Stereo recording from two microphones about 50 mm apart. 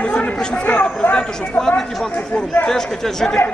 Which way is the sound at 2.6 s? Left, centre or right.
Centre.